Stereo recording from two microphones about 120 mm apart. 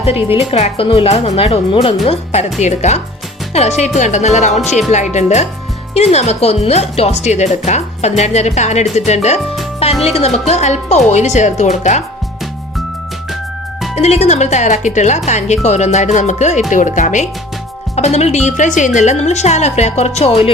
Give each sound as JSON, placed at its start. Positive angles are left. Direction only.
{"t": 0.3, "sound": "speech", "side_deg": 55}
{"t": 1.7, "sound": "speech", "side_deg": 50}
{"t": 5.9, "sound": "speech", "side_deg": 60}
{"t": 13.9, "sound": "speech", "side_deg": 65}
{"t": 15.3, "sound": "speech", "side_deg": 75}
{"t": 16.1, "sound": "music", "side_deg": 85}
{"t": 16.7, "sound": "speech", "side_deg": 90}
{"t": 17.9, "sound": "speech", "side_deg": 65}
{"t": 18.9, "sound": "speech", "side_deg": 75}